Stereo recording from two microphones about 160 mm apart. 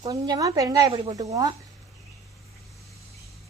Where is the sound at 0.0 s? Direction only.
25° right (ahead or behind).